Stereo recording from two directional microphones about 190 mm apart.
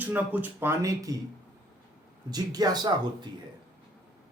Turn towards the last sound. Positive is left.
turn(degrees=-20)  # may be behind; listen again after turning